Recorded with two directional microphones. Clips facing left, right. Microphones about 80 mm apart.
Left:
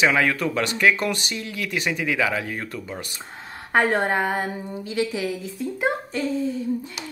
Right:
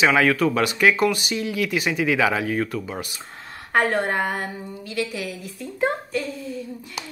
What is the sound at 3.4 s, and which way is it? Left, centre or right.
A woman's voice, left.